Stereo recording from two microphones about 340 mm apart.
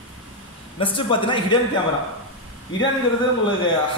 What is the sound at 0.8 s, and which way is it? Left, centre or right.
Speech, centre.